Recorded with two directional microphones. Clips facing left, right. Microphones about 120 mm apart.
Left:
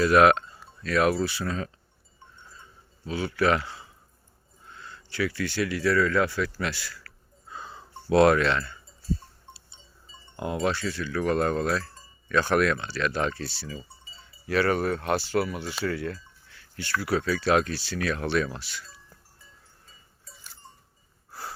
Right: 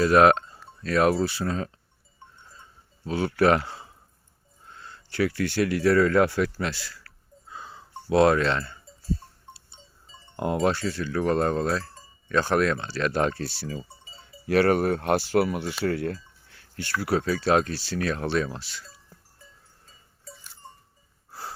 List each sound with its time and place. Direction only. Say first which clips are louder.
0.0 s speech: right 1 dB; 35° right (ahead or behind)
3.1 s speech: right 3 dB; 50° right (ahead or behind)
6.6 s speech: right 1 dB; 35° right (ahead or behind)
7.5 s a sound: left 1 dB; 5° right (ahead or behind)
8.1 s speech: even; 20° right (ahead or behind)
8.4 s speech: even; 35° right (ahead or behind)
10.3 s speech: right 3 dB; 50° right (ahead or behind)
15.8 s a sound: right 2 dB; 55° right (ahead or behind)
17.0 s speech: right 2 dB; 40° right (ahead or behind)